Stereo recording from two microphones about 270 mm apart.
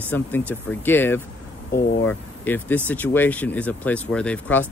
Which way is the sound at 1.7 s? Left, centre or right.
Left.